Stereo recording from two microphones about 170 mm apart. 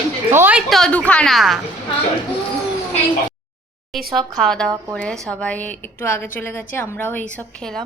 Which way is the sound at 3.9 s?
Centre (ahead or behind).